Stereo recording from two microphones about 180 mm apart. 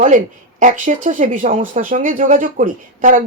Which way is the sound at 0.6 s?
45° right (ahead or behind).